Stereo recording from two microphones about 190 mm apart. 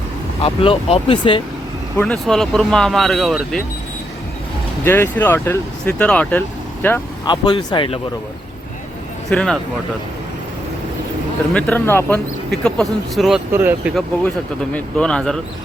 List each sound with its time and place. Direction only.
0.4 s speech: 30° left (ahead or behind)
2.0 s speech: 5° left (ahead or behind)
4.9 s speech: 10° left (ahead or behind)
7.3 s speech: 25° left (ahead or behind)
9.3 s speech: 5° left (ahead or behind)
11.5 s speech: 10° left (ahead or behind)
13.5 s speech: 10° right (ahead or behind)
14.3 s speech: 5° left (ahead or behind)